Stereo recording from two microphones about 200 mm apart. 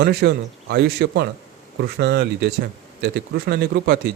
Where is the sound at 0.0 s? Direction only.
50° right (ahead or behind).